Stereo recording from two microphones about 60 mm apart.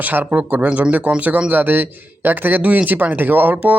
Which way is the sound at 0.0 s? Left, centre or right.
Right.